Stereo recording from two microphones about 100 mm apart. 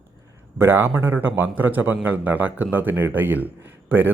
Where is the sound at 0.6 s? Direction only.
20° right (ahead or behind).